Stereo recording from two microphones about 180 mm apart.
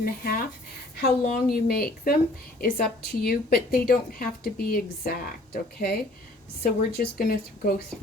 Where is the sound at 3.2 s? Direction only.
60° left (ahead or behind).